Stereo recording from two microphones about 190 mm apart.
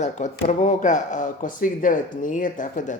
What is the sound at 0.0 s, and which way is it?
Speech, 40° left (ahead or behind).